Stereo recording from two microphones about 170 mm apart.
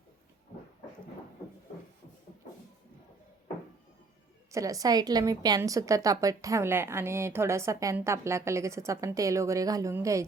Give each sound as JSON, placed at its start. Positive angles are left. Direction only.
{"t": 4.5, "sound": "a woman's voice", "side_deg": -20}